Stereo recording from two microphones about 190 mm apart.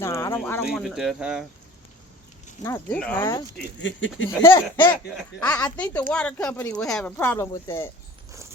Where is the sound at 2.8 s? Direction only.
10° left (ahead or behind).